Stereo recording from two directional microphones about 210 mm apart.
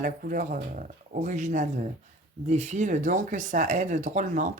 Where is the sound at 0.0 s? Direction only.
40° right (ahead or behind).